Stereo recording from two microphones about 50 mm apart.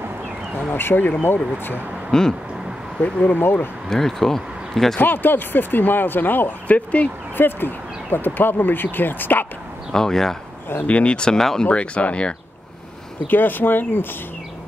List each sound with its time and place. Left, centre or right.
0.6 s speech: left
2.1 s speech: centre
3.3 s speech: left
3.9 s speech: centre
4.9 s speech: left
7.3 s speech: left
9.9 s speech: centre
10.9 s speech: left
11.6 s speech: left
13.3 s speech: left